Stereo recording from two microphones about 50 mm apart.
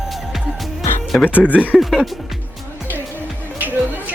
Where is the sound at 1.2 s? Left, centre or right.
Left.